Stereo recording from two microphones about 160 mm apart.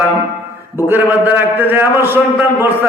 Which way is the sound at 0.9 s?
15° right (ahead or behind).